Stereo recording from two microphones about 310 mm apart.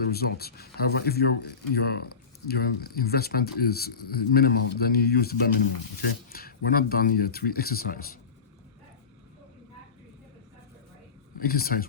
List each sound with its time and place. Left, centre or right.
0.0 s speech: left
11.3 s speech: left